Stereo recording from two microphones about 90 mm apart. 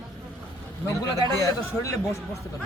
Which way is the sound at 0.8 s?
35° left (ahead or behind).